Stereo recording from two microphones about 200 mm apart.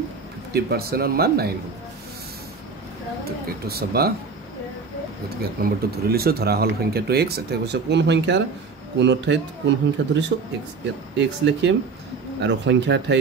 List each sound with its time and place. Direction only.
0.5 s speech: 55° right (ahead or behind)
3.3 s speech: 50° right (ahead or behind)
5.4 s speech: 50° right (ahead or behind)